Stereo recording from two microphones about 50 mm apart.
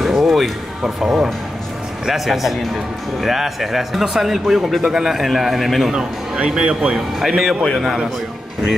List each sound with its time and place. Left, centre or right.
0.0 s music: centre
2.0 s speech: centre
5.9 s speech: centre
7.2 s speech: centre